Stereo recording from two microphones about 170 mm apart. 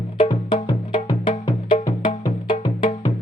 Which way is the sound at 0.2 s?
35° left (ahead or behind).